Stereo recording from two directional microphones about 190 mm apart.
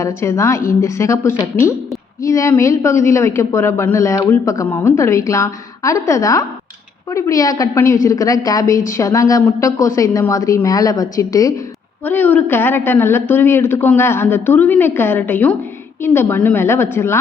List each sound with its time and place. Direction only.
0.0 s a woman's voice: 15° left (ahead or behind)